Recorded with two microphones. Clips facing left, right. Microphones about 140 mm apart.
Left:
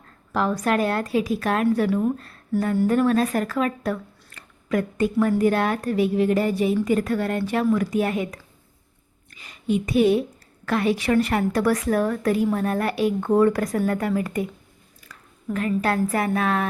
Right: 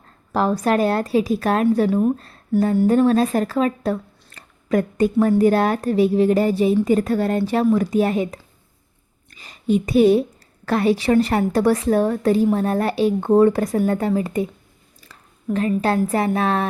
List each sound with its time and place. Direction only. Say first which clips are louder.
0.3 s a woman's voice: right 3 dB; 35° right (ahead or behind)
1.9 s a woman's voice: right 4 dB; 20° right (ahead or behind)
15.1 s a sound: left 1 dB; 30° right (ahead or behind)
15.4 s a woman's voice: right 3 dB; 25° right (ahead or behind)